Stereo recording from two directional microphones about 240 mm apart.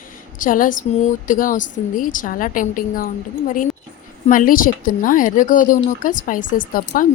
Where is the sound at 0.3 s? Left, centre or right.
Left.